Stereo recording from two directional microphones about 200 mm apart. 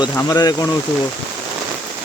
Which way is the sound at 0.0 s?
20° left (ahead or behind).